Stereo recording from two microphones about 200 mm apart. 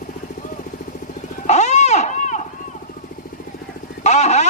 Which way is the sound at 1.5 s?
35° left (ahead or behind).